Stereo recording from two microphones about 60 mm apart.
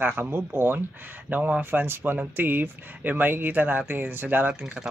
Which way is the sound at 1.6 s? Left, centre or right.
Right.